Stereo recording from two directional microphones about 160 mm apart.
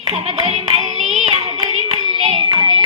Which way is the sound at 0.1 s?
40° right (ahead or behind).